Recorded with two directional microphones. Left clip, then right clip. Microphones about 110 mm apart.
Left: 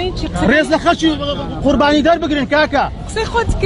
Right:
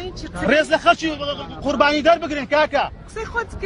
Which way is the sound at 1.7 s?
10° right (ahead or behind).